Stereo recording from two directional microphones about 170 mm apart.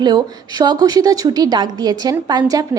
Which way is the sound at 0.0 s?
25° right (ahead or behind).